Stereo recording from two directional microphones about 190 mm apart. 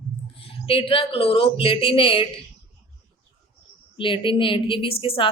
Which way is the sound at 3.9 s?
25° left (ahead or behind).